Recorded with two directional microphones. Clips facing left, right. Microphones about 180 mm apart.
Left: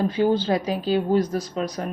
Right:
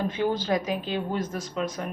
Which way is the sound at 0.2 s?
30° left (ahead or behind).